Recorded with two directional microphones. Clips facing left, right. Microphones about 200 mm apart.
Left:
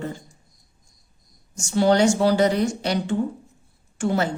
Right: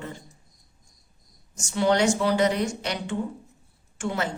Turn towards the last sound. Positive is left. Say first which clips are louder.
# left 6 dB
turn(degrees=35)  # may be behind; listen again after turning